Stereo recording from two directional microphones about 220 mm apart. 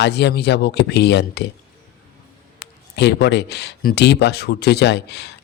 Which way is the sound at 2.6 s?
50° left (ahead or behind).